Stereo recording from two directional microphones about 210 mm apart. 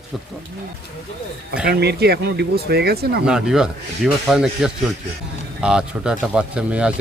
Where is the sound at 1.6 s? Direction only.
50° right (ahead or behind).